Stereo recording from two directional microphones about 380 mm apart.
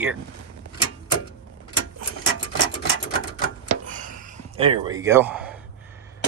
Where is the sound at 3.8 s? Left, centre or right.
Right; by 6.0 s centre.